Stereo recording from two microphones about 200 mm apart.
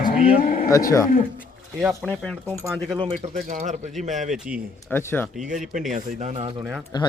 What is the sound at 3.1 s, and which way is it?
Speech, 40° right (ahead or behind).